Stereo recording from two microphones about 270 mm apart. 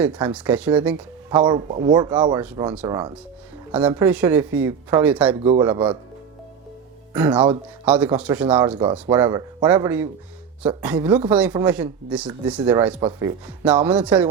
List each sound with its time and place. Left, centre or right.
0.0 s speech: centre
0.3 s speech: centre
1.5 s speech: centre
5.4 s speech: centre
7.1 s speech: centre